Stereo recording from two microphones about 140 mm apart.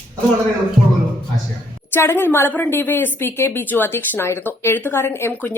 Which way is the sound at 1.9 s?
15° left (ahead or behind).